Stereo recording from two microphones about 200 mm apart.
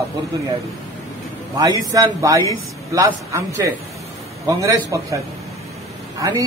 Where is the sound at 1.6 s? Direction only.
15° right (ahead or behind).